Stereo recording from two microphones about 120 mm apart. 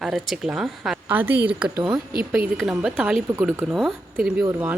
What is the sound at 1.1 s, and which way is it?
Speech, 15° right (ahead or behind).